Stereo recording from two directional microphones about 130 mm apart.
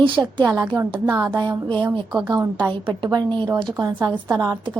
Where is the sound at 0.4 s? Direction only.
15° right (ahead or behind).